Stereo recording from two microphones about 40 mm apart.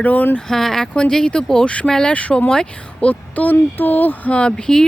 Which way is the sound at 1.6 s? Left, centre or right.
Left.